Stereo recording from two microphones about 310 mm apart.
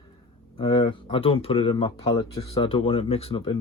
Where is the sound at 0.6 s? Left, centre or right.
Centre.